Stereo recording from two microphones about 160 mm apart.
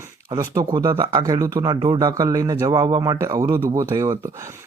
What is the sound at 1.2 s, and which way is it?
Speech, 20° right (ahead or behind).